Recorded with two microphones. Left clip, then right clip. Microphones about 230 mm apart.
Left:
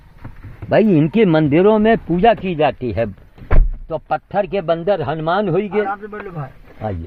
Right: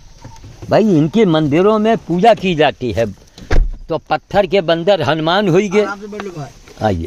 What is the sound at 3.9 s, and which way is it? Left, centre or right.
Speech, right.